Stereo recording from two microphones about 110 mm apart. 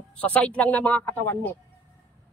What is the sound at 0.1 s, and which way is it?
A man's voice, 10° left (ahead or behind).